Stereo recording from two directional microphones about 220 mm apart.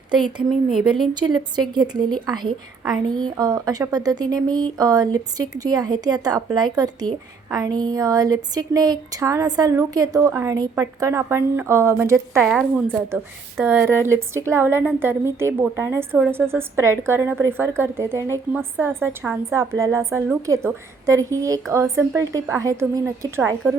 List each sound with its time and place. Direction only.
1.5 s a woman's voice: 20° right (ahead or behind)